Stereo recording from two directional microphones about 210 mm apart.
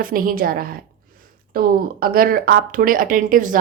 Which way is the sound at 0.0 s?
40° right (ahead or behind).